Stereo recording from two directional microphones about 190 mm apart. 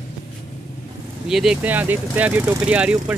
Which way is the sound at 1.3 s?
Centre (ahead or behind).